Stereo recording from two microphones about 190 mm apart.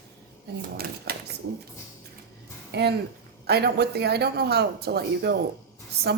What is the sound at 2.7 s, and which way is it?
A woman's voice, 60° right (ahead or behind).